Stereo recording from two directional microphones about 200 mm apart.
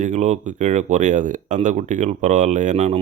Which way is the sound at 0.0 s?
35° right (ahead or behind).